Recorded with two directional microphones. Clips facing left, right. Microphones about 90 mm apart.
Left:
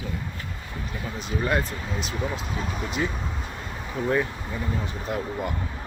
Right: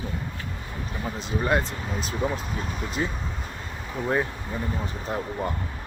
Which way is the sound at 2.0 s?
40° right (ahead or behind).